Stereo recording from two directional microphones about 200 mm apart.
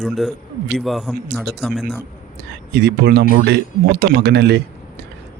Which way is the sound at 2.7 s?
55° right (ahead or behind).